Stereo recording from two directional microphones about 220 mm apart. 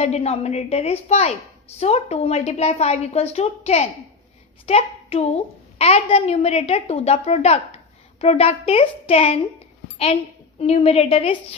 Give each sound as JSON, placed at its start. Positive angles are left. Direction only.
{"t": 0.0, "sound": "a woman's voice", "side_deg": 30}
{"t": 10.6, "sound": "a woman's voice", "side_deg": 25}